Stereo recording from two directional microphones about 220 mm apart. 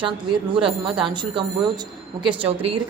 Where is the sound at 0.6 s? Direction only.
20° right (ahead or behind).